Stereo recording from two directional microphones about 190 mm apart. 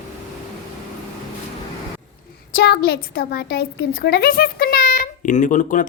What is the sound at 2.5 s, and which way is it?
A woman's voice, 55° left (ahead or behind).